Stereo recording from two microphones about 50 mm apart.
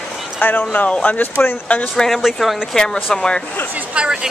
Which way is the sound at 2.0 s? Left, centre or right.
Centre.